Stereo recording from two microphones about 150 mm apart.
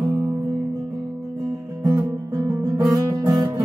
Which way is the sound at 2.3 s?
25° right (ahead or behind).